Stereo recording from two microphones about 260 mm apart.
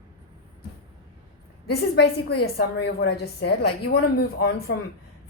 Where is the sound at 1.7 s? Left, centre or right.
Left.